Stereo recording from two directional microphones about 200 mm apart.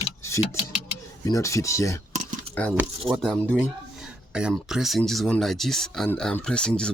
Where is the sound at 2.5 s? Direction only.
30° right (ahead or behind).